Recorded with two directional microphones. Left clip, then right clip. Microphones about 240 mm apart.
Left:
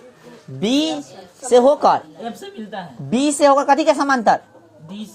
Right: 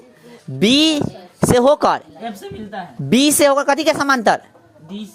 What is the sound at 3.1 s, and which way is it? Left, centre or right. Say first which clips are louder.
A woman's voice: right 1 dB; right.